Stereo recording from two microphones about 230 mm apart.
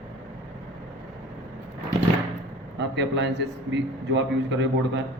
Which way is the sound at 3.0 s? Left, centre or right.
Right.